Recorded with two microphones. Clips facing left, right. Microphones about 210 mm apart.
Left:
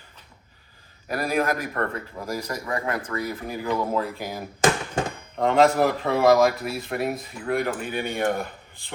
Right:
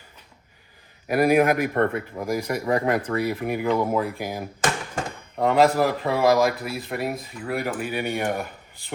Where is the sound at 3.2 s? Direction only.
70° right (ahead or behind).